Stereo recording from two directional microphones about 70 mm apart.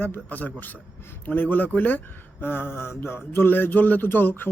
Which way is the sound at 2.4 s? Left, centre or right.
Left.